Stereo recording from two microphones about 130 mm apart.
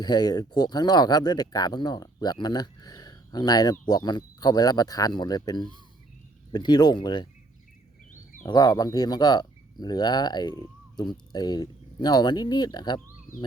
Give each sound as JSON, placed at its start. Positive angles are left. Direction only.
{"t": 0.0, "sound": "speech", "side_deg": 30}
{"t": 8.4, "sound": "speech", "side_deg": 30}